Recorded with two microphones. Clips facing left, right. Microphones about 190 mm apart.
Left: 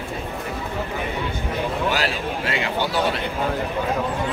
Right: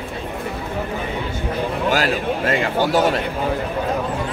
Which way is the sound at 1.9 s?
45° right (ahead or behind).